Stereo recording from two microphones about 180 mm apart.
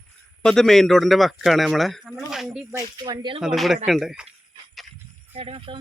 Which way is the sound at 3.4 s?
Centre (ahead or behind).